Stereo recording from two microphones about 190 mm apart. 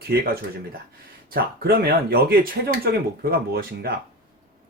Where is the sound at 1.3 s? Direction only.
50° right (ahead or behind).